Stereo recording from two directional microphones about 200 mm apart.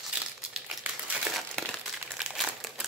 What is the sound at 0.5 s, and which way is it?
Crumpling, 5° right (ahead or behind).